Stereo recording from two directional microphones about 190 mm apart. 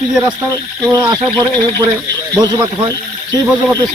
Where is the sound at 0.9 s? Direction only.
20° right (ahead or behind).